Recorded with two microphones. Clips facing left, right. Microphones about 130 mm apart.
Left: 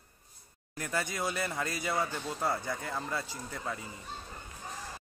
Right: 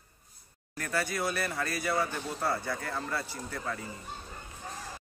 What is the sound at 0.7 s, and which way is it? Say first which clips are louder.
Speech: right 2 dB; 20° left (ahead or behind).